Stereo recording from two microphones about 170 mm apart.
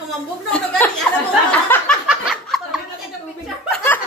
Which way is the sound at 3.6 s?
5° left (ahead or behind).